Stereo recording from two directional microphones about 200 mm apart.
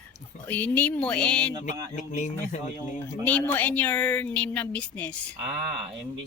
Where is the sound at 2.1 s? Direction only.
35° left (ahead or behind).